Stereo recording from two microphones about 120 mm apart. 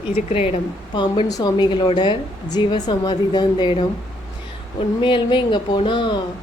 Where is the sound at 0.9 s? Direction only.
40° left (ahead or behind).